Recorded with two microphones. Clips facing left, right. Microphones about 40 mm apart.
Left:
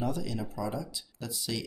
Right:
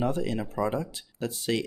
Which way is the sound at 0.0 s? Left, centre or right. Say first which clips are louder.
Right 5 dB; right.